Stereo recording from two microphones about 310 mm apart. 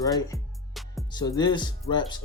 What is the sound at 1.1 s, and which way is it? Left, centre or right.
Speech, centre.